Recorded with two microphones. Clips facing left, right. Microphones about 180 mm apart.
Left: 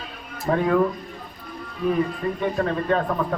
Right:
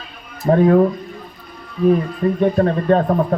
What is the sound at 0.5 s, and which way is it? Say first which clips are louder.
Speech: right 7 dB; 40° right (ahead or behind).